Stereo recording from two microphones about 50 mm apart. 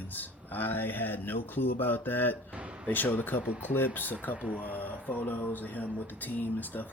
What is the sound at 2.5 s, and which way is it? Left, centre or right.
Speech, right.